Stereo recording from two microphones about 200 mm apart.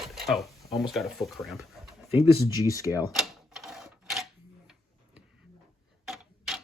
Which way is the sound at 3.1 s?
Centre (ahead or behind).